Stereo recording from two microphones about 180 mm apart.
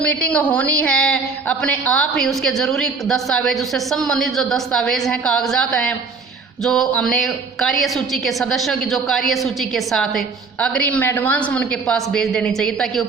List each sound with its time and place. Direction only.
0.0 s a woman's voice: 5° left (ahead or behind)